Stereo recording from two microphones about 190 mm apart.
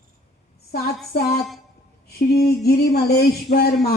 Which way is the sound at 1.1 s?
55° left (ahead or behind).